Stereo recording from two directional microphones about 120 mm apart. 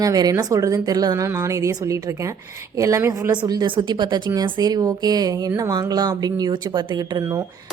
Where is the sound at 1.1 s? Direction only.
20° right (ahead or behind).